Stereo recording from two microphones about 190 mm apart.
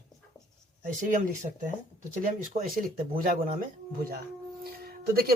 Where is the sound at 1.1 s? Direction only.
45° right (ahead or behind).